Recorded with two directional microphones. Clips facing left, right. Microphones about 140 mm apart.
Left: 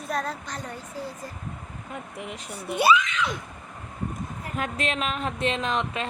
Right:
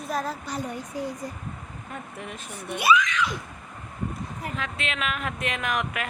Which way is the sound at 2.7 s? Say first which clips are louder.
Left 1 dB; 30° left (ahead or behind).